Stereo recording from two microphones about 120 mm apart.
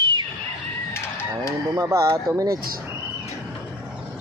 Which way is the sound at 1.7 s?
25° right (ahead or behind).